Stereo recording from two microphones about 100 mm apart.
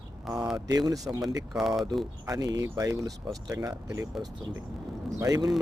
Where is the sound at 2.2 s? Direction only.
35° right (ahead or behind).